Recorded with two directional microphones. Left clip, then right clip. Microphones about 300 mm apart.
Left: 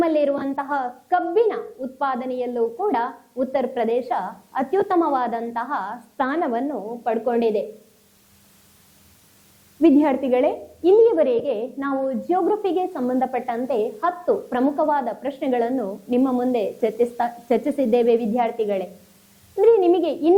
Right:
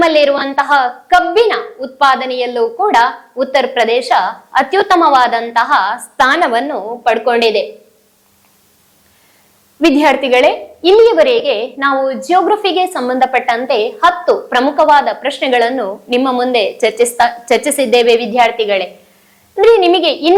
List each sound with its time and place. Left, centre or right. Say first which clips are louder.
0.0 s a woman's voice: right 10 dB; centre
2.6 s a woman's voice: right 10 dB; centre
2.9 s a woman's voice: right 13 dB; centre
9.8 s a woman's voice: right 7 dB; centre